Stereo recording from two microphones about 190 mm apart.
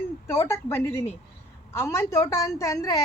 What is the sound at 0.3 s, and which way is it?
A woman's voice, 15° left (ahead or behind).